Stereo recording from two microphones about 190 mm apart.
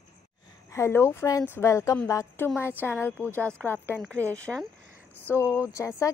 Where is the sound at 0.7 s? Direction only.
15° left (ahead or behind).